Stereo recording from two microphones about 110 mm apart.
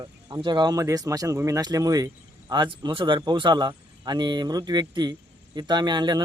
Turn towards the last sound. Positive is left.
turn(degrees=-40)  # may be behind; listen again after turning